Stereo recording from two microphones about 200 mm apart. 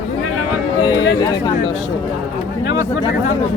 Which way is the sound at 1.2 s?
20° left (ahead or behind).